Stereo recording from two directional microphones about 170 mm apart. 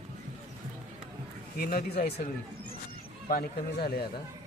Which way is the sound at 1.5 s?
65° left (ahead or behind).